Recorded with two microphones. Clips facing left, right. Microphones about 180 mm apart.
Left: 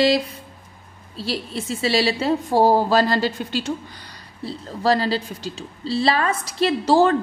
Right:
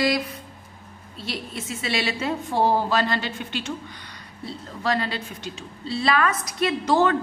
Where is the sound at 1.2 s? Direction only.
35° left (ahead or behind).